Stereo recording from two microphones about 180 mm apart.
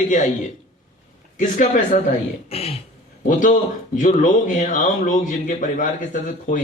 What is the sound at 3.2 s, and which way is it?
Speech, 45° left (ahead or behind).